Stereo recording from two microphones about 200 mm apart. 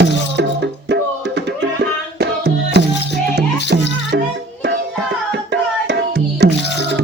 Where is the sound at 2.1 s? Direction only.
55° right (ahead or behind).